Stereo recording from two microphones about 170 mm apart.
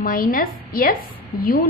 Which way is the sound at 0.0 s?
55° left (ahead or behind).